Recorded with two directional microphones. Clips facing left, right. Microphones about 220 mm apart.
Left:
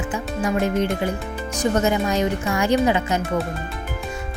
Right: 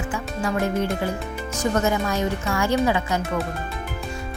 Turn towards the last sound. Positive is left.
turn(degrees=20)  # may be behind; listen again after turning